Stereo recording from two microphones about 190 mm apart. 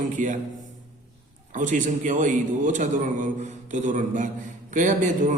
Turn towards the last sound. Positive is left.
turn(degrees=-40)  # may be behind; listen again after turning